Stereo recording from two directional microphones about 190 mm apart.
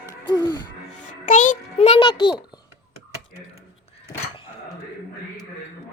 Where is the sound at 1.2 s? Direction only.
45° left (ahead or behind); by 2.3 s 25° left (ahead or behind).